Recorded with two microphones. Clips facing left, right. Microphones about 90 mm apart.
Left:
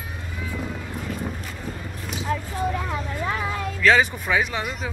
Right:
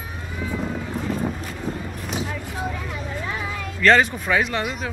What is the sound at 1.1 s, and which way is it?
Wind, 35° right (ahead or behind).